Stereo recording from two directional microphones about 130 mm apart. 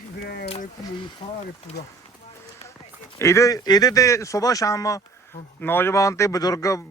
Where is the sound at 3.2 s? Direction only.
25° left (ahead or behind).